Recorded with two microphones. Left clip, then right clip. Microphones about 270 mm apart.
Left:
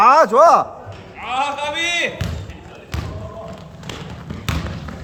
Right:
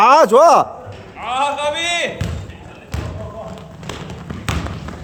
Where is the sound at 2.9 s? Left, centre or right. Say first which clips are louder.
Right 1 dB; centre.